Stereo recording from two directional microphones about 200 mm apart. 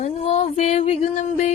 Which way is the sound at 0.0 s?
35° left (ahead or behind).